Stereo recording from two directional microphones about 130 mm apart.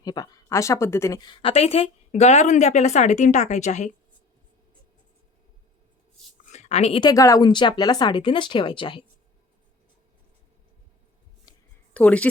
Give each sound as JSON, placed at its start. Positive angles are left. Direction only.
{"t": 0.0, "sound": "speech", "side_deg": 30}
{"t": 1.2, "sound": "a woman's voice", "side_deg": 40}
{"t": 6.4, "sound": "a sound", "side_deg": 60}
{"t": 7.0, "sound": "speech", "side_deg": 25}
{"t": 11.9, "sound": "speech", "side_deg": 10}